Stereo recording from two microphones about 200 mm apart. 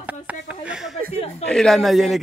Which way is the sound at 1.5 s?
5° left (ahead or behind).